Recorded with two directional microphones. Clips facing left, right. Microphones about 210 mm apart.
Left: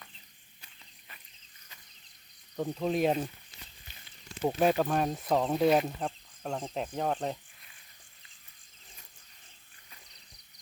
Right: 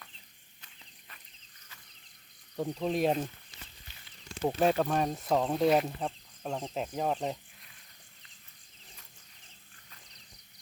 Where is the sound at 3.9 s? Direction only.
15° left (ahead or behind).